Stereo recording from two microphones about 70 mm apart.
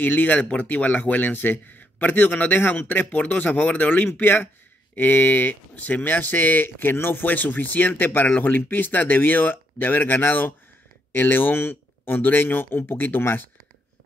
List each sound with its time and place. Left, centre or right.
0.0 s speech: left